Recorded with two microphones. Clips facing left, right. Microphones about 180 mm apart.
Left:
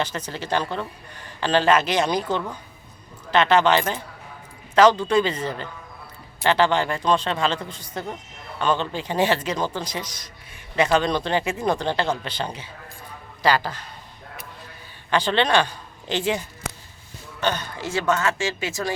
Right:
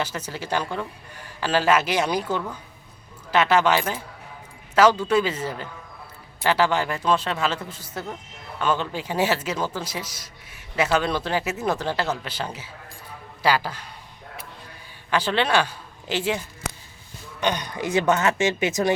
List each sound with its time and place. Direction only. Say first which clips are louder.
0.0 s speech: left 1 dB; 10° right (ahead or behind)
15.1 s speech: left 2 dB; 5° right (ahead or behind)
17.4 s speech: right 1 dB; 15° right (ahead or behind)